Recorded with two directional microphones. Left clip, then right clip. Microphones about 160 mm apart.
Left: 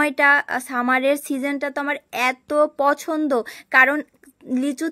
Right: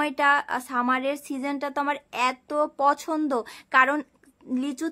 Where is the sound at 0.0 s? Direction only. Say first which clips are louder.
Left 5 dB; 20° left (ahead or behind).